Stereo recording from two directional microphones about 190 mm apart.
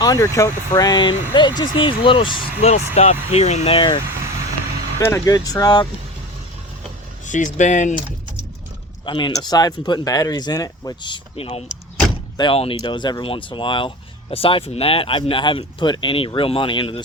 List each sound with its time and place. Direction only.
0.0 s speech: 15° left (ahead or behind)
4.9 s speech: 15° left (ahead or behind)
7.3 s speech: 40° left (ahead or behind)
9.0 s speech: 25° left (ahead or behind)